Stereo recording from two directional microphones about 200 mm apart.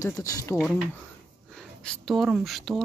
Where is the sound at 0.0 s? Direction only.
15° left (ahead or behind).